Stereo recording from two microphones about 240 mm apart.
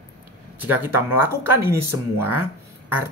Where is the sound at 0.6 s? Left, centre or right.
Centre.